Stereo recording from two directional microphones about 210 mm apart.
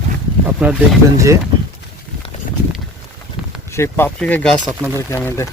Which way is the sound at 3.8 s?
10° left (ahead or behind).